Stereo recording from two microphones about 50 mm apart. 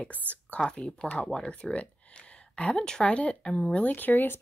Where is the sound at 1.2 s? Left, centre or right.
Centre.